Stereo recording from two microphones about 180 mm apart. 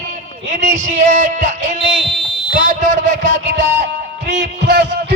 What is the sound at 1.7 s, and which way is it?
Speech, 30° left (ahead or behind).